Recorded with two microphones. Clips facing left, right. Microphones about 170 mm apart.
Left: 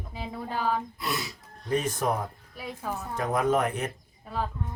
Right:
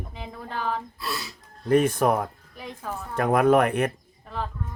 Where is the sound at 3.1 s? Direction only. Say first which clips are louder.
Right 7 dB; 60° right (ahead or behind).